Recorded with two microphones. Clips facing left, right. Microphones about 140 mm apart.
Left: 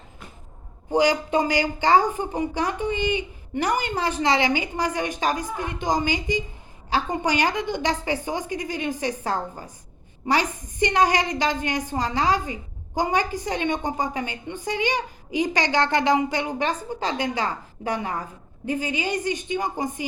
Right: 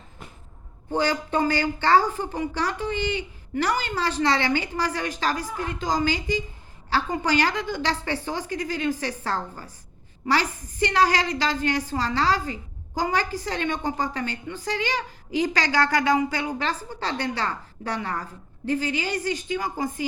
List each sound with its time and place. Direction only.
0.9 s a woman's voice: 15° left (ahead or behind)